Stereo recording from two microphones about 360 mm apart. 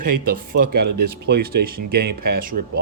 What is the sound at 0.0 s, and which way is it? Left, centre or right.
A man's voice, right.